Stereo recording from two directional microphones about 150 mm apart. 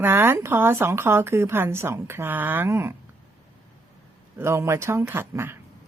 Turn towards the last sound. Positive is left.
turn(degrees=-15)  # may be behind; listen again after turning